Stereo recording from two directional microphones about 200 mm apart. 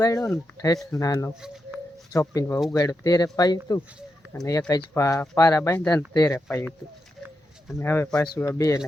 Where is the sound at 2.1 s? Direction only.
15° left (ahead or behind).